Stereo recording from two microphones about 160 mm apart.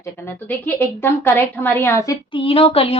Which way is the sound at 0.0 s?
15° left (ahead or behind).